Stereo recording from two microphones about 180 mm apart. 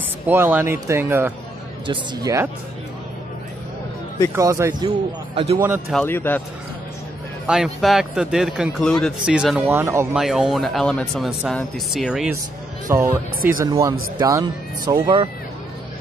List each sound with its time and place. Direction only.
0.3 s speech: 10° right (ahead or behind)
4.4 s speech: 15° right (ahead or behind)
4.8 s speech: 35° right (ahead or behind)
5.9 s speech: 5° left (ahead or behind)
7.4 s speech: 5° right (ahead or behind)
10.1 s speech: centre (ahead or behind)
12.8 s speech: 15° right (ahead or behind)
13.4 s speech: 50° right (ahead or behind)
13.7 s speech: 20° right (ahead or behind)